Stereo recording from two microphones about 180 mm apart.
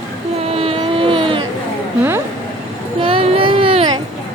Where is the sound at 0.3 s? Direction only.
35° right (ahead or behind).